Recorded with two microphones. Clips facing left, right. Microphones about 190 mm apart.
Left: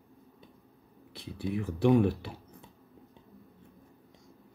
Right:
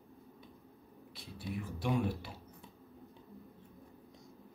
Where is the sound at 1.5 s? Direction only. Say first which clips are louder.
Left 11 dB; 65° left (ahead or behind).